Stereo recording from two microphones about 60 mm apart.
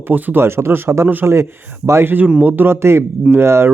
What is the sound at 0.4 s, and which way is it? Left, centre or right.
Speech, right.